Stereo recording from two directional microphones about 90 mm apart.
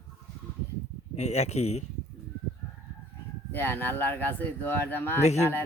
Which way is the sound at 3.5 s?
25° left (ahead or behind).